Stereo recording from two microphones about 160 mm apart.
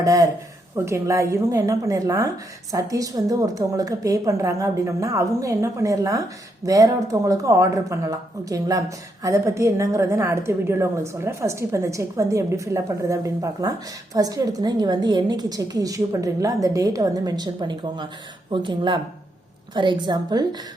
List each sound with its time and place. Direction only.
0.0 s a woman's voice: 20° right (ahead or behind)